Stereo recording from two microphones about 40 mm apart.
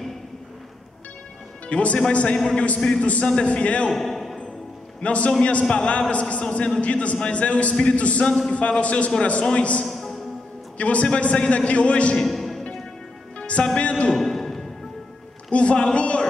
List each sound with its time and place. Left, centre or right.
1.7 s a man's voice: left
2.8 s a man's voice: centre
3.3 s a man's voice: left
3.9 s a sound: centre
5.0 s a man's voice: left
9.8 s music: centre
10.8 s a man's voice: left
12.3 s music: centre
13.4 s music: left
13.7 s a man's voice: left
14.1 s music: centre
15.5 s a man's voice: left